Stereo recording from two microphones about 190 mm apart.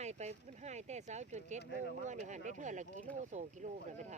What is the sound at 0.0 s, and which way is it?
Speech, 35° right (ahead or behind).